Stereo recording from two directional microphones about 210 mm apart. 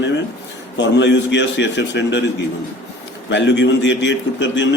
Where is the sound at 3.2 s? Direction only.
60° left (ahead or behind).